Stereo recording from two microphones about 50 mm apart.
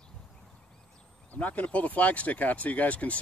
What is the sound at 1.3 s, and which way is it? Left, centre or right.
Speech, left.